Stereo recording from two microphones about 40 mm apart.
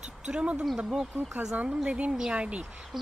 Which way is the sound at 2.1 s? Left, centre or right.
Right.